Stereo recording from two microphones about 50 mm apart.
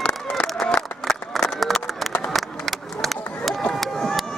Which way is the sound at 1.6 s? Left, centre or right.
Centre.